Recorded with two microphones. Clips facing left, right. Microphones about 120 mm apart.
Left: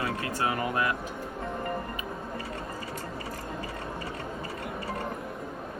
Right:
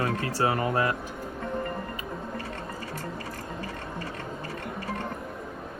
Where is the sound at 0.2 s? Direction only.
35° right (ahead or behind).